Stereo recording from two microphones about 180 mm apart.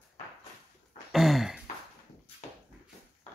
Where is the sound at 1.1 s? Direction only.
Centre (ahead or behind).